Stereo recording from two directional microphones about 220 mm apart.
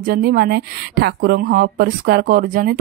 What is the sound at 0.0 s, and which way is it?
A woman's voice, 45° right (ahead or behind).